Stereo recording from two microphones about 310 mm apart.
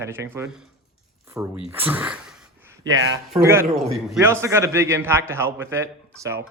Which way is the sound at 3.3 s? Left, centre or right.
Centre.